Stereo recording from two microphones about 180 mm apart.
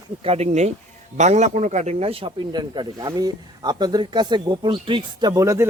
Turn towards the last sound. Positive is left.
turn(degrees=-15)  # may be behind; listen again after turning